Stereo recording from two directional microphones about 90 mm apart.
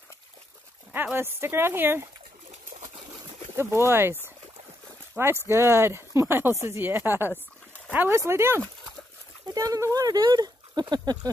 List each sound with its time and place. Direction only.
0.9 s speech: 25° right (ahead or behind)
3.5 s speech: 30° right (ahead or behind)
9.5 s speech: 40° right (ahead or behind)